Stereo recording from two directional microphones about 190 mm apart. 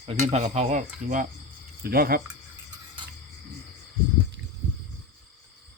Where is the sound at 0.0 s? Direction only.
30° right (ahead or behind).